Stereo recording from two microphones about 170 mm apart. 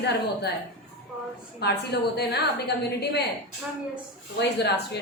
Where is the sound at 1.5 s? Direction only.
75° left (ahead or behind).